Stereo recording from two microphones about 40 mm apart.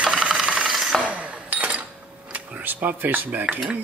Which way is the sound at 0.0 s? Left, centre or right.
Right.